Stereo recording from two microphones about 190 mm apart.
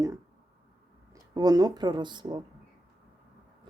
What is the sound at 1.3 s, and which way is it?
Speech, 20° right (ahead or behind).